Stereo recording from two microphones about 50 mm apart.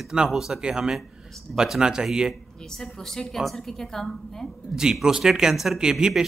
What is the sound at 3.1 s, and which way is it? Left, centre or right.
Speech, centre.